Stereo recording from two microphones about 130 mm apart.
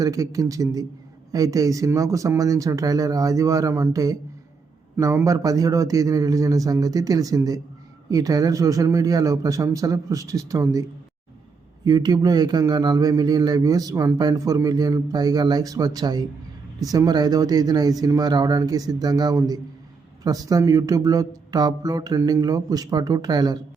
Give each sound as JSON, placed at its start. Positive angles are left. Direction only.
{"t": 0.0, "sound": "speech", "side_deg": -25}
{"t": 11.9, "sound": "speech", "side_deg": -30}